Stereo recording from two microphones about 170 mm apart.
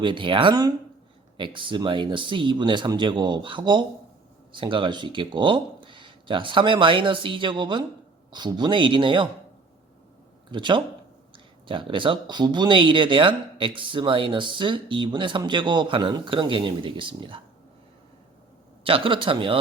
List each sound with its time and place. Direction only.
0.0 s speech: 30° right (ahead or behind)
10.5 s speech: 25° right (ahead or behind)
18.9 s a man's voice: 30° right (ahead or behind)